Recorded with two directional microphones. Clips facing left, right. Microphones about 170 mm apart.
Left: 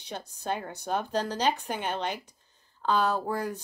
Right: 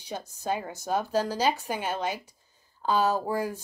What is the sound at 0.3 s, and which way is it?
Speech, 10° right (ahead or behind).